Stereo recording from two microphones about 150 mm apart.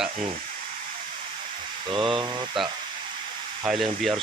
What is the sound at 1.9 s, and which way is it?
Speech, 35° right (ahead or behind).